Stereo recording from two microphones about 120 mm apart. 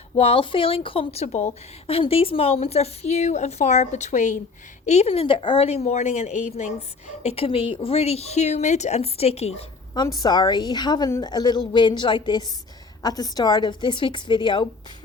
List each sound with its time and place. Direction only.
0.2 s speech: 50° left (ahead or behind); by 1.5 s 75° left (ahead or behind)
1.9 s speech: 50° left (ahead or behind); by 4.4 s 90° left
4.9 s speech: 60° left (ahead or behind)
7.2 s speech: 55° left (ahead or behind)
9.9 s a woman's voice: 35° left (ahead or behind)